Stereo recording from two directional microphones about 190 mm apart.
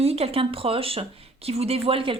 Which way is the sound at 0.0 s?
30° right (ahead or behind).